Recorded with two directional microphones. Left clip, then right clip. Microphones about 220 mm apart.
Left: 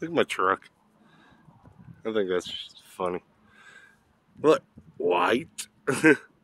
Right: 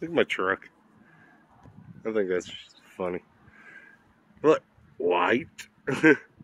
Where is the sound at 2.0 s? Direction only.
Centre (ahead or behind).